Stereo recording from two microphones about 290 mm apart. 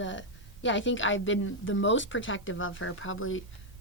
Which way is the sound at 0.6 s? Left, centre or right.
Left.